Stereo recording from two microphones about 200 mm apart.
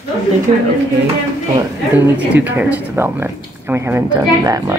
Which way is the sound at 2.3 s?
10° right (ahead or behind).